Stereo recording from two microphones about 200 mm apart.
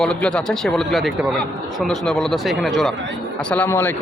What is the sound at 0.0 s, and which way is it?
Speech, 5° left (ahead or behind).